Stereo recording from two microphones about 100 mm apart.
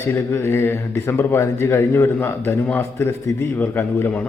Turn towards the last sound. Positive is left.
turn(degrees=20)  # may be behind; listen again after turning